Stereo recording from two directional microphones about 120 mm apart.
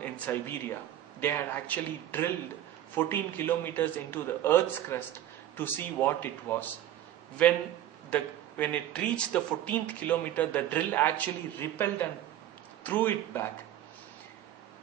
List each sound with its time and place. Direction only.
0.0 s speech: 15° left (ahead or behind)
8.1 s speech: 10° left (ahead or behind)